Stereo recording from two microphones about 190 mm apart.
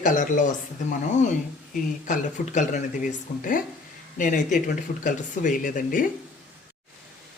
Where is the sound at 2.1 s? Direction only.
40° left (ahead or behind).